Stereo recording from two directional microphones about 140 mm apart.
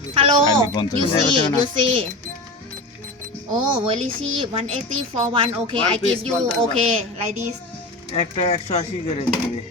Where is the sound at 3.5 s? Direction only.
35° right (ahead or behind).